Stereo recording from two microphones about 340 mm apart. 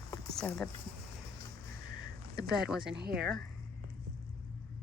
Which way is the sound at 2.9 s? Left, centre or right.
Right.